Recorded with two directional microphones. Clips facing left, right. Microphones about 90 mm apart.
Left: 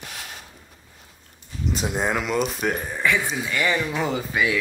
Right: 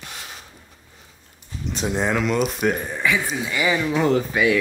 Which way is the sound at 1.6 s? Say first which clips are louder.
Right 1 dB; 5° left (ahead or behind).